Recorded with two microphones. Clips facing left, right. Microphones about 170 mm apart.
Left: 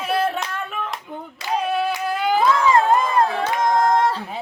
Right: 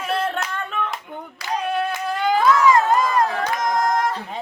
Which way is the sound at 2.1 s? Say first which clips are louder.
Right 1 dB; 5° left (ahead or behind).